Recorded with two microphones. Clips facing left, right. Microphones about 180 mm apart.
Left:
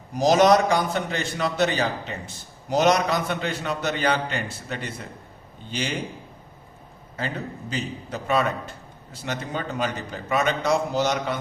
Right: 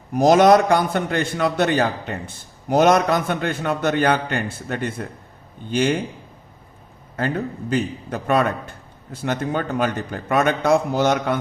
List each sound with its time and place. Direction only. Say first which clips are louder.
0.1 s a man's voice: right 4 dB; 55° right (ahead or behind)
7.2 s a man's voice: right 7 dB; 55° right (ahead or behind)